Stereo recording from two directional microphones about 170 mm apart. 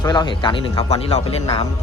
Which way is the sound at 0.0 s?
25° left (ahead or behind).